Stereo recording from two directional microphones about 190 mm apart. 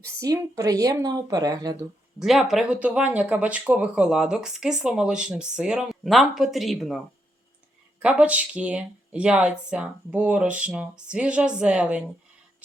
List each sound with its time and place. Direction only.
0.0 s speech: 15° right (ahead or behind)
2.1 s speech: centre (ahead or behind)